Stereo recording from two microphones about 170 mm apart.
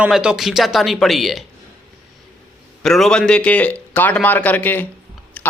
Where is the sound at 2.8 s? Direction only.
Centre (ahead or behind).